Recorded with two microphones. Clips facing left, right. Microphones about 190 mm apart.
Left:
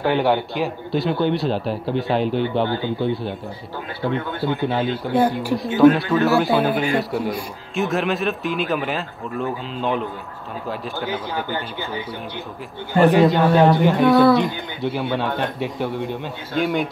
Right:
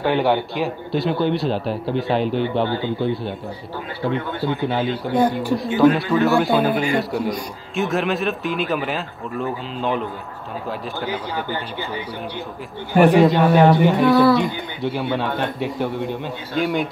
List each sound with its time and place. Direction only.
0.0 s a man's voice: centre (ahead or behind)
13.1 s a man's voice: centre (ahead or behind)